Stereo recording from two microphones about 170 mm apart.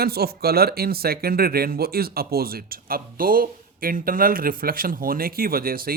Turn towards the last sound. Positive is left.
turn(degrees=-60)  # may be behind; listen again after turning